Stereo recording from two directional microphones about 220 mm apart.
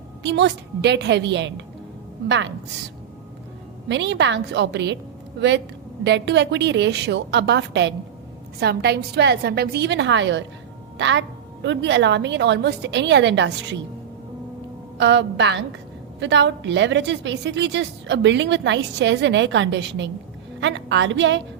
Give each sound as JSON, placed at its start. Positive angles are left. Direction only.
{"t": 0.2, "sound": "a woman's voice", "side_deg": -50}
{"t": 3.8, "sound": "a woman's voice", "side_deg": -50}
{"t": 14.9, "sound": "a woman's voice", "side_deg": -55}